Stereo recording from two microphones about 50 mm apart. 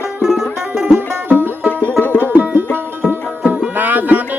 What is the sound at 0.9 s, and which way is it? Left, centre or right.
Music, right.